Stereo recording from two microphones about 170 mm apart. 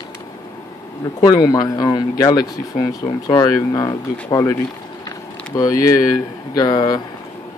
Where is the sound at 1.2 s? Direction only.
20° left (ahead or behind).